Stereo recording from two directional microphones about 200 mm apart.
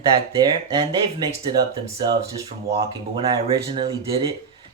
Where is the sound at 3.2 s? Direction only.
25° right (ahead or behind).